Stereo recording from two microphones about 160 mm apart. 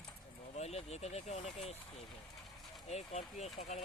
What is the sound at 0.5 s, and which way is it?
Speech, 40° left (ahead or behind).